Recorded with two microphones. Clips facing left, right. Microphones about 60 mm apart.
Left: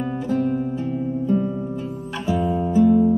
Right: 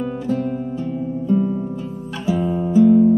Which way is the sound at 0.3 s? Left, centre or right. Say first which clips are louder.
Left 1 dB; centre.